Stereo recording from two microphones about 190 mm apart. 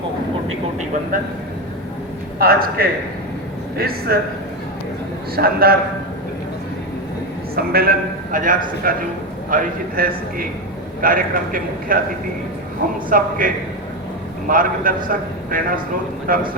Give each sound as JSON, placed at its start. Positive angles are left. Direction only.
{"t": 1.1, "sound": "a man's voice", "side_deg": -45}
{"t": 2.4, "sound": "a man's voice", "side_deg": -50}
{"t": 5.4, "sound": "a man's voice", "side_deg": -55}
{"t": 7.5, "sound": "a man's voice", "side_deg": -50}
{"t": 13.1, "sound": "a man's voice", "side_deg": -45}